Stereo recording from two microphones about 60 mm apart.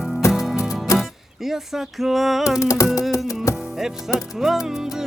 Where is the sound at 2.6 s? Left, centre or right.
Left.